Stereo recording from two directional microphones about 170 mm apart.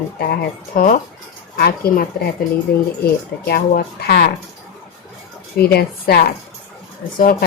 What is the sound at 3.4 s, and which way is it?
Speech, 65° left (ahead or behind).